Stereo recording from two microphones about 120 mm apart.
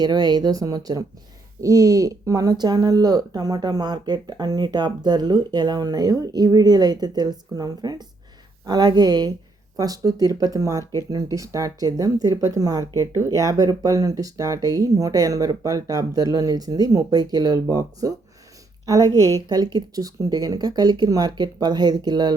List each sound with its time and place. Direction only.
0.0 s speech: 35° right (ahead or behind)